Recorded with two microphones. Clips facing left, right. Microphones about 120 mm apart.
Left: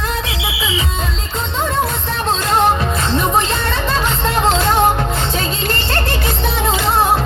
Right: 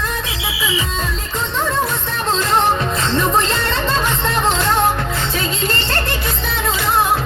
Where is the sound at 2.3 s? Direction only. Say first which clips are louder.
Left 1 dB; 15° left (ahead or behind).